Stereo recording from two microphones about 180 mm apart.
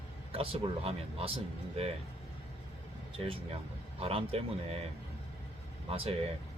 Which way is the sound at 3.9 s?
35° right (ahead or behind).